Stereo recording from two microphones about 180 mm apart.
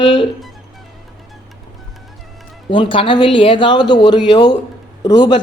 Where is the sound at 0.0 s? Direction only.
30° left (ahead or behind).